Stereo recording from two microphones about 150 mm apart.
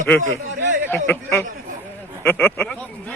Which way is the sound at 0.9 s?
15° left (ahead or behind).